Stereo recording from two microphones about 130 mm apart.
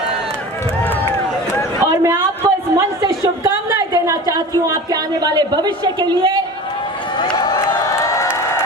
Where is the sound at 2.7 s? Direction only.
25° right (ahead or behind).